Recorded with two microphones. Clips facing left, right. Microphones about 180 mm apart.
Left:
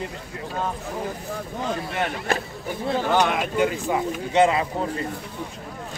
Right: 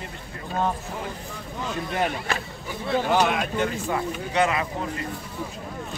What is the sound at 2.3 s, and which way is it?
Speech, 50° left (ahead or behind).